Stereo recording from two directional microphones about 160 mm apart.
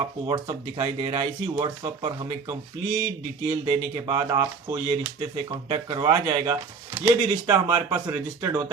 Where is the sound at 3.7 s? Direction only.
30° right (ahead or behind).